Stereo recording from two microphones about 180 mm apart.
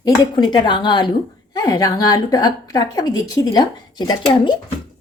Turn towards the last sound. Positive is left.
turn(degrees=25)  # may be behind; listen again after turning